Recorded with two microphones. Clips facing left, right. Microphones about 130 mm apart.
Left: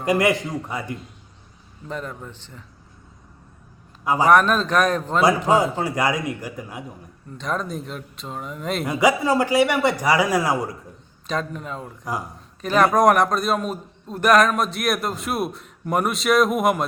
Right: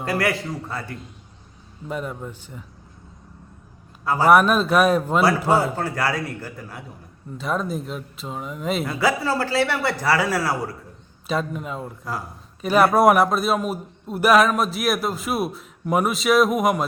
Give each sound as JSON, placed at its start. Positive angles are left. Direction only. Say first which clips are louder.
{"t": 0.0, "sound": "a man's voice", "louder": "left 4 dB", "side_deg": 20}
{"t": 1.9, "sound": "speech", "louder": "right 2 dB", "side_deg": -10}
{"t": 4.0, "sound": "a man's voice", "louder": "left 1 dB", "side_deg": 15}
{"t": 4.3, "sound": "speech", "louder": "right 2 dB", "side_deg": -10}
{"t": 5.7, "sound": "a man's voice", "louder": "left 2 dB", "side_deg": 15}
{"t": 7.3, "sound": "a man's voice", "louder": "right 2 dB", "side_deg": -5}
{"t": 8.9, "sound": "a man's voice", "louder": "left 6 dB", "side_deg": 15}
{"t": 11.3, "sound": "a man's voice", "louder": "right 2 dB", "side_deg": -5}